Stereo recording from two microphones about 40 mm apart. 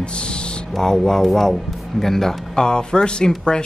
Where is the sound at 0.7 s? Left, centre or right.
Centre.